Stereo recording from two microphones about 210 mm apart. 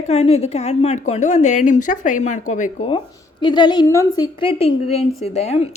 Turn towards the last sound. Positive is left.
turn(degrees=30)  # may be behind; listen again after turning